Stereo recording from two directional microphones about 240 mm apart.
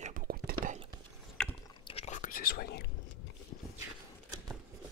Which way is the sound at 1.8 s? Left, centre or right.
Left.